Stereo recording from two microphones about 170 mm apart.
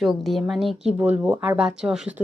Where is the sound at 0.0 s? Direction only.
Centre (ahead or behind).